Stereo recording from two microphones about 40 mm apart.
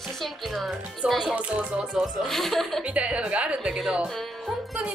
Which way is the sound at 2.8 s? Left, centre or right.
Right.